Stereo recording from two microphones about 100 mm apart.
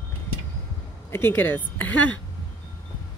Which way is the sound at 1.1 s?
20° left (ahead or behind).